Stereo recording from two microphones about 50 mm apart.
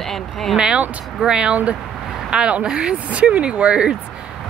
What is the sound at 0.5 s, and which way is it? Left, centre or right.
Speech, centre.